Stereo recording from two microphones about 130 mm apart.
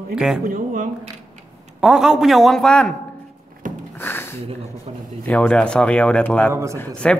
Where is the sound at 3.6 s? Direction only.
90° right.